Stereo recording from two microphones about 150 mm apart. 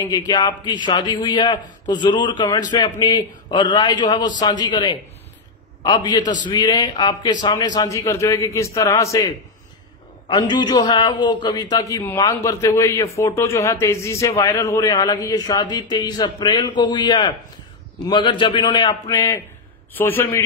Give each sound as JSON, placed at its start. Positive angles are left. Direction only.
{"t": 0.0, "sound": "a man's voice", "side_deg": 25}
{"t": 10.2, "sound": "a man's voice", "side_deg": 30}